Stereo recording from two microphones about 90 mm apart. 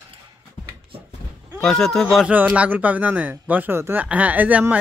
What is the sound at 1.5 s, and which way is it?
Speech, 5° left (ahead or behind).